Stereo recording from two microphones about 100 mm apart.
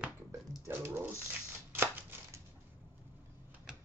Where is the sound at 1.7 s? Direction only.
20° right (ahead or behind).